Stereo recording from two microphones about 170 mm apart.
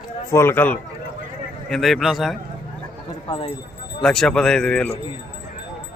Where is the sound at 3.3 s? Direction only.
30° left (ahead or behind).